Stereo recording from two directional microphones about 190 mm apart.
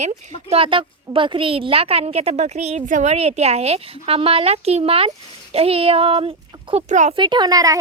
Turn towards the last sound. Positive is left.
turn(degrees=-20)  # may be behind; listen again after turning